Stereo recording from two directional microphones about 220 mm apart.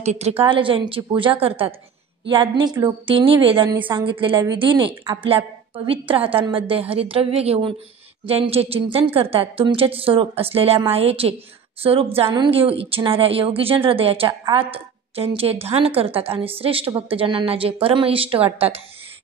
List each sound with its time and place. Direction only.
0.0 s speech: 30° right (ahead or behind)